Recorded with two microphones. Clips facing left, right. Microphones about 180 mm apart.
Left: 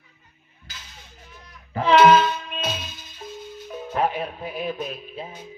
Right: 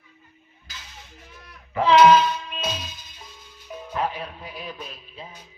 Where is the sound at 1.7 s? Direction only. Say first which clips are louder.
Even; 35° left (ahead or behind).